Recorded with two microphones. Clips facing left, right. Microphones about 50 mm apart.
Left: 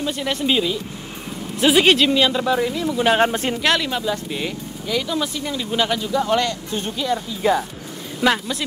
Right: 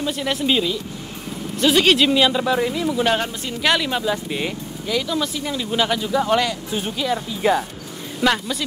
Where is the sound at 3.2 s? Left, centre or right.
Left.